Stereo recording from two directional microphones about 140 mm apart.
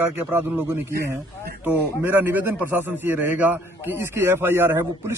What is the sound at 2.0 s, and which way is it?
Speech, 15° right (ahead or behind).